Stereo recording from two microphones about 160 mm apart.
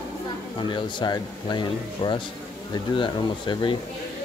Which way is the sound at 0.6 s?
30° left (ahead or behind).